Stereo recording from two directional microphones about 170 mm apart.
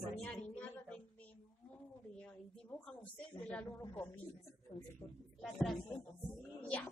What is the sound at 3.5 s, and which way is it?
Speech, 10° left (ahead or behind).